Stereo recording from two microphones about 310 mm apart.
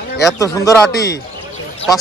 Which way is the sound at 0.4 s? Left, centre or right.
Centre.